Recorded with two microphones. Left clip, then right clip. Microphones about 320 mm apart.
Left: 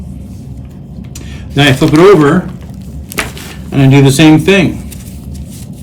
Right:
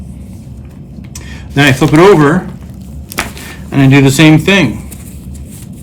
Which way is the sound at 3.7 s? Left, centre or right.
Right.